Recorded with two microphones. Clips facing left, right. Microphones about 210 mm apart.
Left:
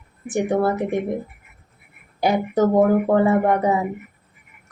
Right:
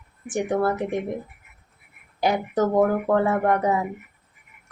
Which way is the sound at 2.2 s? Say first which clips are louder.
Left 4 dB; 10° left (ahead or behind).